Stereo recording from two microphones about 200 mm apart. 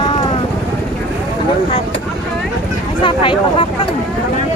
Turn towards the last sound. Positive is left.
turn(degrees=25)  # may be behind; listen again after turning